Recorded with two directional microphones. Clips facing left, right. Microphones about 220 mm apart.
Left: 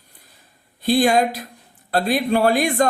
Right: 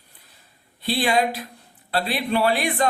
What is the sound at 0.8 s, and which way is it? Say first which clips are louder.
Speech: left 5 dB; 45° left (ahead or behind).